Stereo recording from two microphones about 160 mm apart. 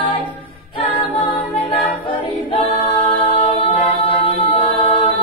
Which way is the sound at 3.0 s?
35° left (ahead or behind).